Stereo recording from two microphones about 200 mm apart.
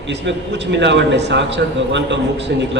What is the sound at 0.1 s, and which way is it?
A man's voice, 60° right (ahead or behind).